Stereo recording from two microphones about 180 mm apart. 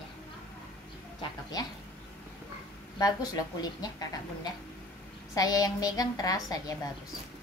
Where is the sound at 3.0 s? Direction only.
20° left (ahead or behind).